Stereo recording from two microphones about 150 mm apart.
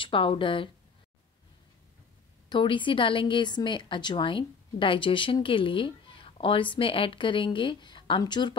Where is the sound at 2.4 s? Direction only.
30° left (ahead or behind).